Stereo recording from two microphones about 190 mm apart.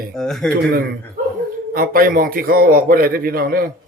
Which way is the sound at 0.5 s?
50° right (ahead or behind).